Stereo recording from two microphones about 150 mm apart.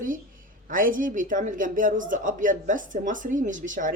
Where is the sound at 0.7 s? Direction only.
65° right (ahead or behind).